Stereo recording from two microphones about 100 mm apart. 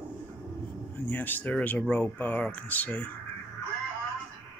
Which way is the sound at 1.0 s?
20° left (ahead or behind).